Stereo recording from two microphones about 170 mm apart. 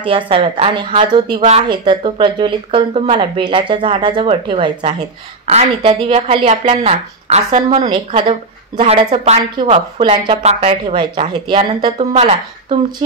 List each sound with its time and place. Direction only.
0.3 s speech: 35° right (ahead or behind)
7.8 s speech: 30° right (ahead or behind)